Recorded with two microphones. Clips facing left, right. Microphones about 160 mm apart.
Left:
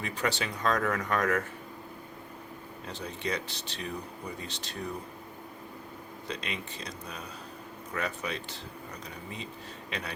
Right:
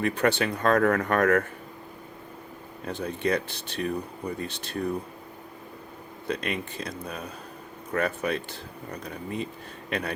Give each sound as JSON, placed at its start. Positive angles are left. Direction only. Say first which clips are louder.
{"t": 0.0, "sound": "speech", "louder": "right 8 dB", "side_deg": -55}
{"t": 2.8, "sound": "speech", "louder": "right 8 dB", "side_deg": -55}
{"t": 6.2, "sound": "speech", "louder": "right 8 dB", "side_deg": -55}